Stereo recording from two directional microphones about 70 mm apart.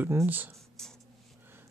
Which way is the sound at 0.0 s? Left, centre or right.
Right.